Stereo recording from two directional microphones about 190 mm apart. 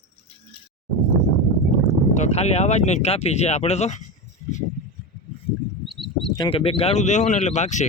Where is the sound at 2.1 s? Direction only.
35° left (ahead or behind).